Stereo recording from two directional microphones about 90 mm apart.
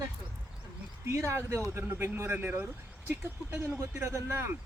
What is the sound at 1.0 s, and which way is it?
Speech, 30° right (ahead or behind).